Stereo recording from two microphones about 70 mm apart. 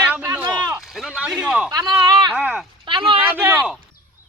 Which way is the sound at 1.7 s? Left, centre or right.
Right.